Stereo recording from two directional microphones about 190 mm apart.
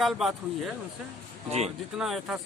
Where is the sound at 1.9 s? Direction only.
Centre (ahead or behind).